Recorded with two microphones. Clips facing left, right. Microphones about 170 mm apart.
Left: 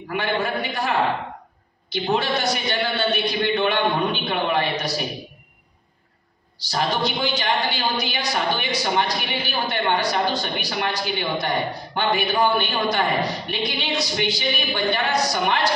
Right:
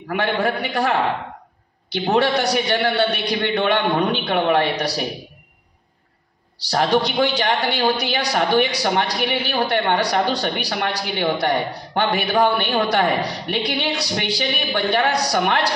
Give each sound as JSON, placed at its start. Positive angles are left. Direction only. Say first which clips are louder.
{"t": 0.1, "sound": "a woman's voice", "louder": "right 3 dB", "side_deg": -70}
{"t": 6.6, "sound": "a woman's voice", "louder": "right 5 dB", "side_deg": -65}